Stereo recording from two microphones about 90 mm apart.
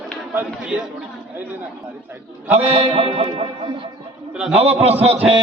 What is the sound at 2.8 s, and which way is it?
Music, 90° right.